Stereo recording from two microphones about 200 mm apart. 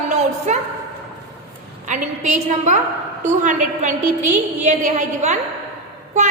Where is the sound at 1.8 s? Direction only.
40° right (ahead or behind).